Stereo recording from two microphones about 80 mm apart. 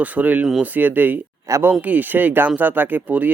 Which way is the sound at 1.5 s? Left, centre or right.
Right.